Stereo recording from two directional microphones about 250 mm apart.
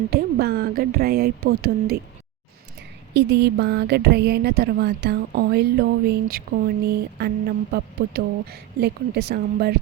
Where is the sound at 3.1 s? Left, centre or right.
Right.